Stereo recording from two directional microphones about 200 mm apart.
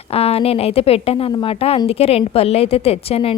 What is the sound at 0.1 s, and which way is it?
A woman's voice, 30° left (ahead or behind).